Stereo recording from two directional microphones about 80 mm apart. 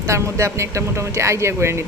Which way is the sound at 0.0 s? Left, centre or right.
Right.